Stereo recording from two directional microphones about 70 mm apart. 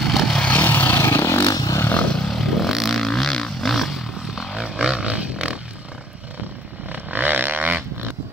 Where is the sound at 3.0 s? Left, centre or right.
Centre.